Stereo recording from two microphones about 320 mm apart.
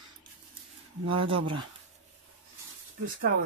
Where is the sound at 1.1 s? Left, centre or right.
Centre.